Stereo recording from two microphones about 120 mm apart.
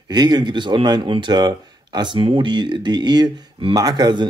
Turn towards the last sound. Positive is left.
turn(degrees=-35)  # may be behind; listen again after turning